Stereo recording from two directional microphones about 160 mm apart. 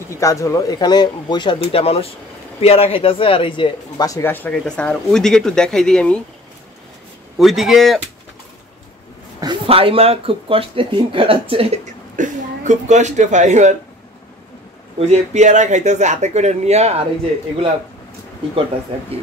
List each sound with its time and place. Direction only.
0.2 s speech: 20° left (ahead or behind)
7.3 s speech: centre (ahead or behind)
9.4 s speech: 30° right (ahead or behind); by 13.7 s 50° right (ahead or behind)
15.0 s speech: 40° right (ahead or behind)